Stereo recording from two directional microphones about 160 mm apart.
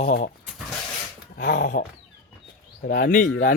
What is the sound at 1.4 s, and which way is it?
Speech, 60° left (ahead or behind).